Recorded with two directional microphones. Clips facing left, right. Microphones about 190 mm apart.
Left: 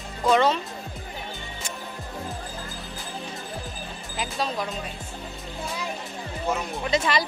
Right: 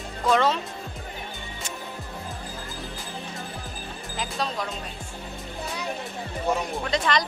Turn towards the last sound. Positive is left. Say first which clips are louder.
# left 1 dB
turn(degrees=5)  # may be behind; listen again after turning